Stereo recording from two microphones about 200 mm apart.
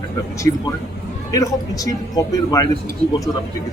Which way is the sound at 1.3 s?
15° left (ahead or behind).